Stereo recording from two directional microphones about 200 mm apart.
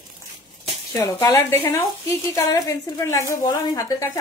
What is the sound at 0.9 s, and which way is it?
A woman's voice, 15° left (ahead or behind).